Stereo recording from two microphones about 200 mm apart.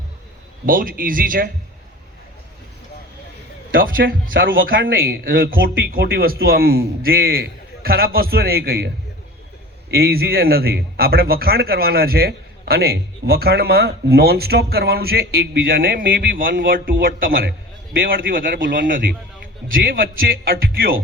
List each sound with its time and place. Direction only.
0.6 s a man's voice: 45° right (ahead or behind)
3.7 s a man's voice: 45° right (ahead or behind)
9.9 s a man's voice: 50° right (ahead or behind)